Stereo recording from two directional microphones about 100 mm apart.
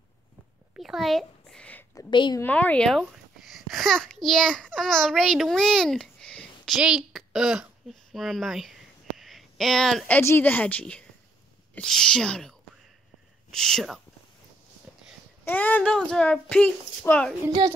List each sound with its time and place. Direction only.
0.7 s a sound: centre (ahead or behind); by 1.9 s 15° left (ahead or behind)
2.0 s a woman's voice: 50° left (ahead or behind)
2.4 s a child's voice: 15° left (ahead or behind)
2.9 s a child's voice: centre (ahead or behind)
6.8 s a sound: 5° right (ahead or behind)
10.2 s a child's voice: 20° left (ahead or behind); by 14.0 s centre (ahead or behind)
15.4 s a child's voice: 15° left (ahead or behind)